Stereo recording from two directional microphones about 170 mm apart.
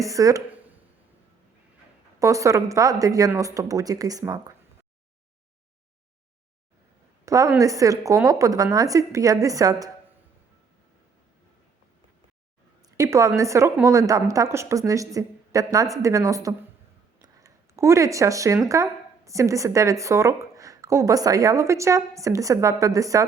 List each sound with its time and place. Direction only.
0.0 s a woman's voice: 20° right (ahead or behind)
2.1 s a woman's voice: 20° right (ahead or behind)
7.3 s a woman's voice: 20° right (ahead or behind)
13.0 s a woman's voice: 20° right (ahead or behind)